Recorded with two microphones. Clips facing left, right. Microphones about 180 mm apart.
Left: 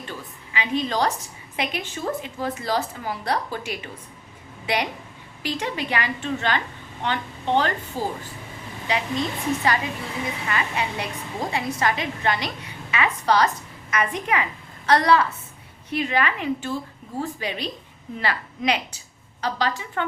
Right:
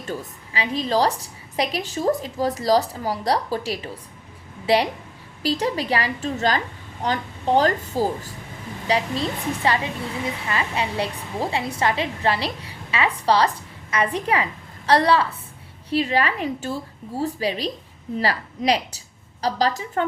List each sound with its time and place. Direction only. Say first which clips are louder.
0.0 s a woman's voice: right 5 dB; 40° right (ahead or behind)